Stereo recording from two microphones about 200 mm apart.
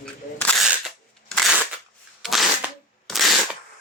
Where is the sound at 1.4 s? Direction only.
Centre (ahead or behind).